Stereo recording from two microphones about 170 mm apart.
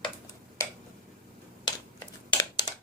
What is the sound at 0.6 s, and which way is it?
Tick-tock, 15° left (ahead or behind).